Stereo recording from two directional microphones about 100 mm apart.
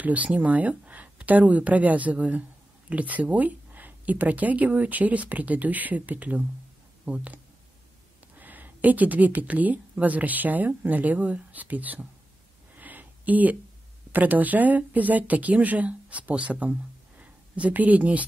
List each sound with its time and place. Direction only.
0.0 s speech: 15° right (ahead or behind)
8.4 s speech: 15° right (ahead or behind)
12.7 s a sound: 15° right (ahead or behind)
14.1 s speech: 15° right (ahead or behind)